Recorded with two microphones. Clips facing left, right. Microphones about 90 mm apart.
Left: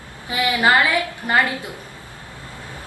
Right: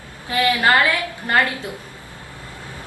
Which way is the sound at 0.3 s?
15° left (ahead or behind).